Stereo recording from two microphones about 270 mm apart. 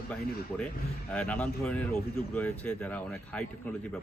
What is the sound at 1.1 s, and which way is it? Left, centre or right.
Speech, centre.